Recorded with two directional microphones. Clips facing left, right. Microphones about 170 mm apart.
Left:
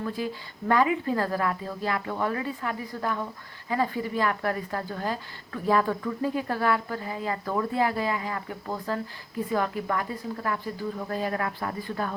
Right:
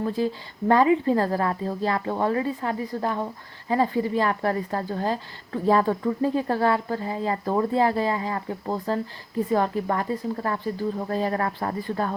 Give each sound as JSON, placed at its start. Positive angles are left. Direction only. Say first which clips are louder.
{"t": 0.7, "sound": "a woman's voice", "louder": "right 5 dB", "side_deg": -30}